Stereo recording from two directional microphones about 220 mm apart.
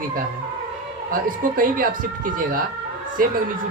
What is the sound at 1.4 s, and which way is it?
Speech, 40° right (ahead or behind).